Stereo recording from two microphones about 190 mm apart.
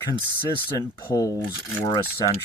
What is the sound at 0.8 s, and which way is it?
Speech, 20° left (ahead or behind).